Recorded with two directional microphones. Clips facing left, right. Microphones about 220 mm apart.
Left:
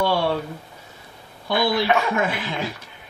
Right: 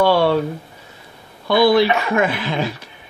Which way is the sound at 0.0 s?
75° right (ahead or behind).